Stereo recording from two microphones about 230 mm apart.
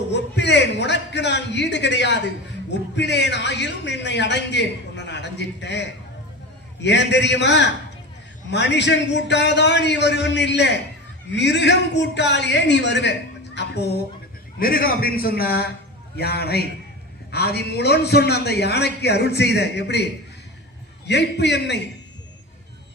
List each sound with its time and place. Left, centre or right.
0.1 s a man's voice: left
21.1 s a man's voice: left